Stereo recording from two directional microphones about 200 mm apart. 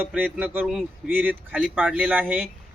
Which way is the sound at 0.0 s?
10° right (ahead or behind).